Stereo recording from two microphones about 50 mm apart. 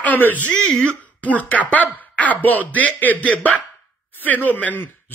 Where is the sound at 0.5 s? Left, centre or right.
Centre.